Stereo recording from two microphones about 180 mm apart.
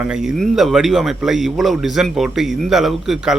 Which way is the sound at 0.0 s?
5° right (ahead or behind).